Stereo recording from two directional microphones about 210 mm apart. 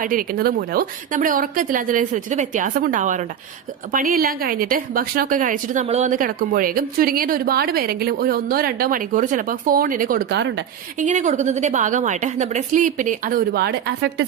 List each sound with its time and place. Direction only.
0.0 s a woman's voice: 40° right (ahead or behind); by 10.7 s 55° right (ahead or behind)
10.9 s a woman's voice: 35° right (ahead or behind); by 14.3 s 50° right (ahead or behind)